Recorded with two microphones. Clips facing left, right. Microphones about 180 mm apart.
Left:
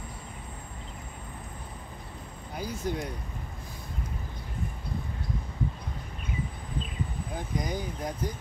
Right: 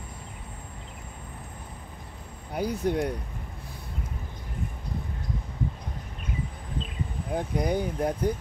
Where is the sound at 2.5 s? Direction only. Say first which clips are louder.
Right 6 dB; 60° right (ahead or behind).